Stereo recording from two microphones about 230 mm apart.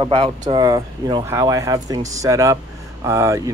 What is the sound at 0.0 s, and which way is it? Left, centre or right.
Speech, right.